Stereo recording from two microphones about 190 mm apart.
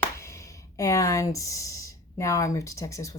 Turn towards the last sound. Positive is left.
turn(degrees=15)  # may be behind; listen again after turning